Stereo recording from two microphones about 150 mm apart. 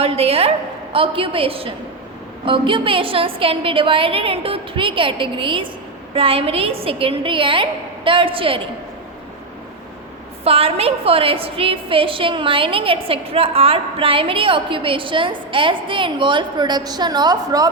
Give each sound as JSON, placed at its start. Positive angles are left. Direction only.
{"t": 0.0, "sound": "a woman's voice", "side_deg": -40}
{"t": 10.4, "sound": "a woman's voice", "side_deg": -40}